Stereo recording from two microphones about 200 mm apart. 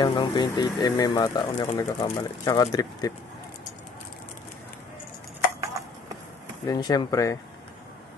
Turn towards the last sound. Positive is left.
turn(degrees=15)  # may be behind; listen again after turning